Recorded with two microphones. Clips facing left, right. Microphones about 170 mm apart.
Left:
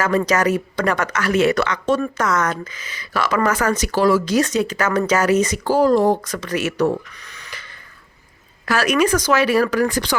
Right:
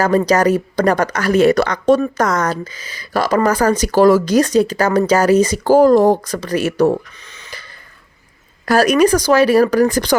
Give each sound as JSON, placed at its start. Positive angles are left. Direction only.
{"t": 0.3, "sound": "speech", "side_deg": -35}
{"t": 5.7, "sound": "speech", "side_deg": -45}
{"t": 8.6, "sound": "speech", "side_deg": -40}